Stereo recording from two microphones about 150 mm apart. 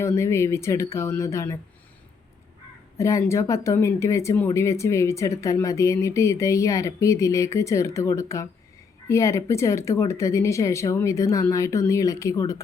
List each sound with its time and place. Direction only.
0.0 s speech: 20° left (ahead or behind)
3.0 s speech: 20° left (ahead or behind)